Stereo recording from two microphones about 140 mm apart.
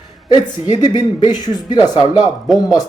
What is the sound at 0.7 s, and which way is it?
Speech, 30° left (ahead or behind).